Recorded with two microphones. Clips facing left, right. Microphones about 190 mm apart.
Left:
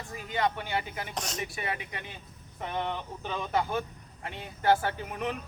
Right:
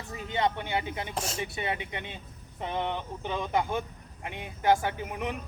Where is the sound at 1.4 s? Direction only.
25° right (ahead or behind).